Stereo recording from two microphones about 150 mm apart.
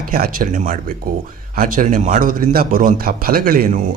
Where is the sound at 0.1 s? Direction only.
75° right (ahead or behind).